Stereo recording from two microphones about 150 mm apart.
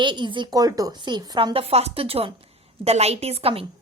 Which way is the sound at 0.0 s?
30° right (ahead or behind).